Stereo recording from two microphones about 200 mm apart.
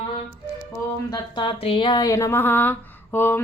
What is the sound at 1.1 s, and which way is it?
Speech, 25° left (ahead or behind).